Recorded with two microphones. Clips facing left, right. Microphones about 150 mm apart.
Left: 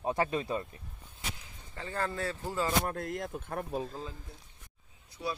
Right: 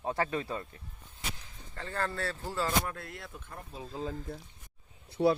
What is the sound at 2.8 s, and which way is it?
Speech, 40° left (ahead or behind).